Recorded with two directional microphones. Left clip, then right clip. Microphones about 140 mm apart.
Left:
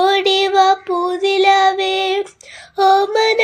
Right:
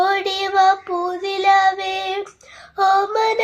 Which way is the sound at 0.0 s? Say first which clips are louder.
Left 5 dB; 45° left (ahead or behind).